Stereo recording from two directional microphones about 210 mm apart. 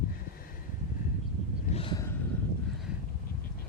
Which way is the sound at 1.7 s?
25° left (ahead or behind).